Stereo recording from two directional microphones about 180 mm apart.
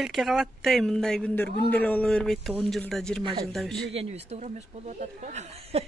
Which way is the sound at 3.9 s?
35° right (ahead or behind).